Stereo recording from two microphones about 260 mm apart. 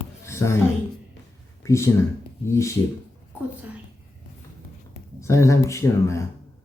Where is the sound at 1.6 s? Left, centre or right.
Centre.